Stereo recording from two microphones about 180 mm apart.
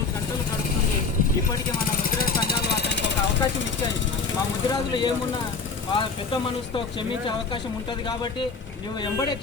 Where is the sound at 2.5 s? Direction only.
65° left (ahead or behind).